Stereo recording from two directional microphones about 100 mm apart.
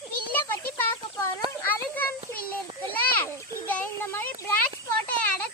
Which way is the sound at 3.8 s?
25° left (ahead or behind).